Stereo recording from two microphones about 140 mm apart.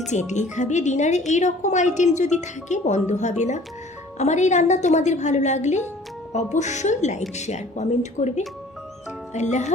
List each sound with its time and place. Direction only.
0.1 s a woman's voice: 60° left (ahead or behind)